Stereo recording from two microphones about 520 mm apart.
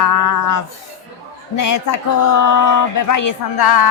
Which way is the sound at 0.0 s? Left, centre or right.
Left.